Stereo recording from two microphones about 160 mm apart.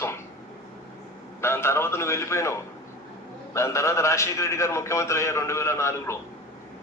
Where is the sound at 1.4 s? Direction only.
15° left (ahead or behind).